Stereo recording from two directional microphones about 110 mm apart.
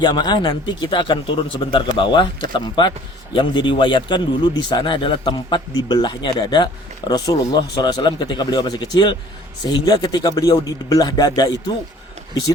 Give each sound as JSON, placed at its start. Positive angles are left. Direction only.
{"t": 0.0, "sound": "a man's voice", "side_deg": 40}